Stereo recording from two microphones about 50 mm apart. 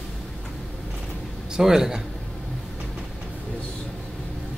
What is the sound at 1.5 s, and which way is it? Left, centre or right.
Speech, centre.